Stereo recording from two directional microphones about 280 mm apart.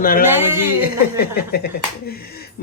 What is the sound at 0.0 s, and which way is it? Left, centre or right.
Speech, left.